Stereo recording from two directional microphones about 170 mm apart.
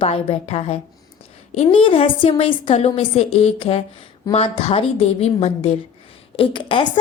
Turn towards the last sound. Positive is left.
turn(degrees=30)  # may be behind; listen again after turning